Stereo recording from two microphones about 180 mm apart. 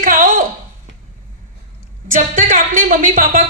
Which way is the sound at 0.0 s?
50° right (ahead or behind).